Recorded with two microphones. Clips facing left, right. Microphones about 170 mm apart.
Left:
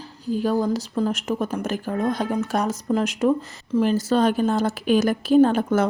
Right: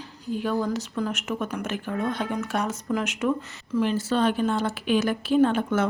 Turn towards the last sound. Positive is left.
turn(degrees=40)  # may be behind; listen again after turning